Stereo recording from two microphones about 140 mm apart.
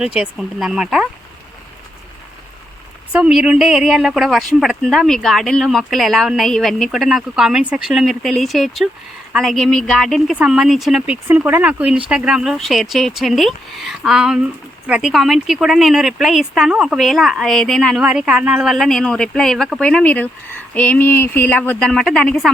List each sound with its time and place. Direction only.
0.0 s speech: 5° right (ahead or behind)
3.1 s a woman's voice: 5° right (ahead or behind)